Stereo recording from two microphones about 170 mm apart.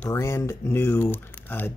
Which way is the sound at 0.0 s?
15° left (ahead or behind).